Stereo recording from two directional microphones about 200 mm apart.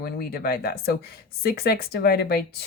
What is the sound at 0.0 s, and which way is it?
Speech, 50° left (ahead or behind).